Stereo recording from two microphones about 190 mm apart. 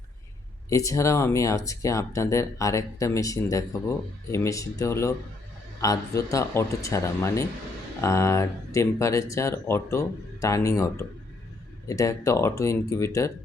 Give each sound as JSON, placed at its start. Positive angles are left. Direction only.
{"t": 0.7, "sound": "speech", "side_deg": 15}